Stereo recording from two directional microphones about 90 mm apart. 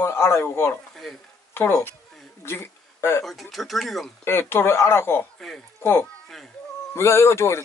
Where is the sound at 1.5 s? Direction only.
25° left (ahead or behind).